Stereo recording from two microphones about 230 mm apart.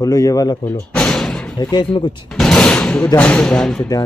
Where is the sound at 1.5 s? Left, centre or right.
Centre.